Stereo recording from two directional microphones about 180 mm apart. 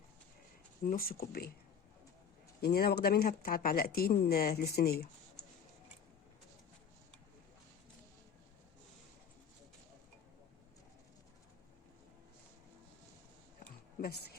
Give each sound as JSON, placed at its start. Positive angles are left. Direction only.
{"t": 0.9, "sound": "speech", "side_deg": 55}
{"t": 2.6, "sound": "speech", "side_deg": 60}
{"t": 14.0, "sound": "a sound", "side_deg": 60}